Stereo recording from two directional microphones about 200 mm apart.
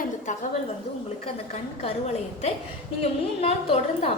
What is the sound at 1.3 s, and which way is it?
Speech, 30° left (ahead or behind).